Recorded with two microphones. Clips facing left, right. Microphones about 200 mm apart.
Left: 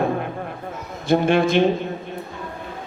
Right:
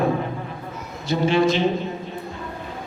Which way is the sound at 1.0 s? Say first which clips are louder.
Left 2 dB; 55° left (ahead or behind).